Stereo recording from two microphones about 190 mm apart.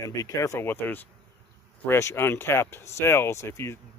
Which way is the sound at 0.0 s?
15° left (ahead or behind).